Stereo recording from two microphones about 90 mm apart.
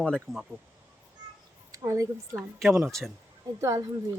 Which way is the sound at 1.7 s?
40° right (ahead or behind).